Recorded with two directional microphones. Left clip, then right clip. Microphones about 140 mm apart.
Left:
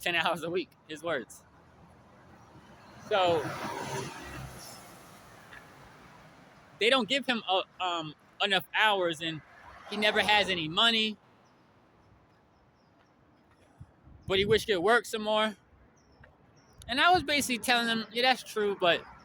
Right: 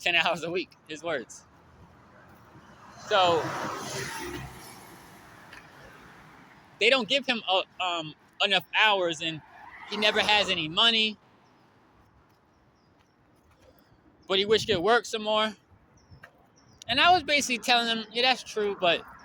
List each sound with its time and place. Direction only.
0.0 s speech: 10° left (ahead or behind)
3.1 s speech: 15° left (ahead or behind)
6.7 s speech: 20° left (ahead or behind)
14.3 s speech: 15° left (ahead or behind)
16.8 s speech: 10° left (ahead or behind)
17.1 s speech: 25° left (ahead or behind)